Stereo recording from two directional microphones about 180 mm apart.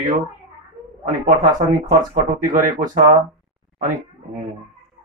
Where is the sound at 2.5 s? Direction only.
50° right (ahead or behind).